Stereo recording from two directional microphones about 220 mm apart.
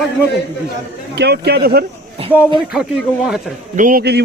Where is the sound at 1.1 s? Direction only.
45° right (ahead or behind).